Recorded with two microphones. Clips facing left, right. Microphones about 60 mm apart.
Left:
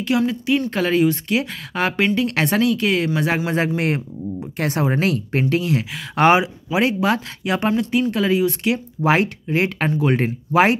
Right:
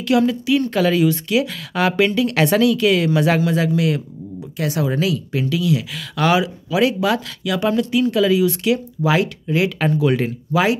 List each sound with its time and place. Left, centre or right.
0.0 s a woman's voice: left
0.7 s speech: left
3.5 s speech: left